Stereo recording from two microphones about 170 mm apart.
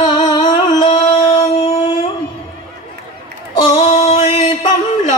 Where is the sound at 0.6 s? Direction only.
30° left (ahead or behind).